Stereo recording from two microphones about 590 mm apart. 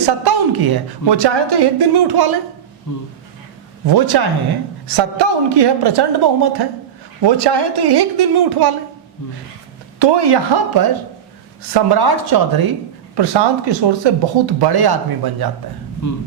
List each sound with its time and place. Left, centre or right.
0.0 s a woman's voice: right
2.9 s speech: left
3.8 s a woman's voice: right
10.0 s a woman's voice: right